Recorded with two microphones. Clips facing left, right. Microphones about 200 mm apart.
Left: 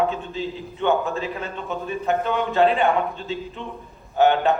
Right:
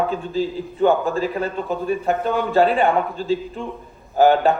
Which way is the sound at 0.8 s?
35° right (ahead or behind).